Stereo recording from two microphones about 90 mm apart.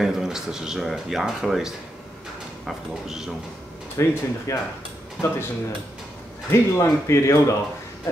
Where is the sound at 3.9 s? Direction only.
30° left (ahead or behind).